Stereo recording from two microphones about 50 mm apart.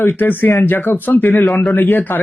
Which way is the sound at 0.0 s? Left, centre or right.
Left.